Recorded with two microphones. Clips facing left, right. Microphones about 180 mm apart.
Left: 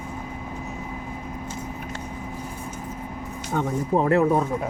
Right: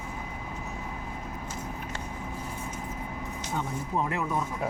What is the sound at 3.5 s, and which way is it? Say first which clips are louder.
Speech: left 9 dB; 60° left (ahead or behind).